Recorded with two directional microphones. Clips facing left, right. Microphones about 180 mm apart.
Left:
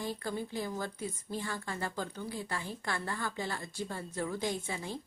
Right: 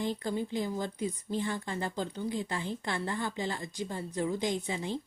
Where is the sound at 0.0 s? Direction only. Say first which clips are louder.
Right 4 dB; 20° right (ahead or behind).